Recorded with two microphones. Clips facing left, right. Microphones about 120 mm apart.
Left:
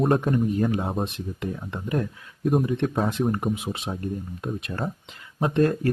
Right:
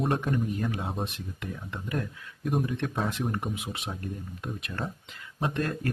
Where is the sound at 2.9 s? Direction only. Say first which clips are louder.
Left 6 dB; 40° left (ahead or behind).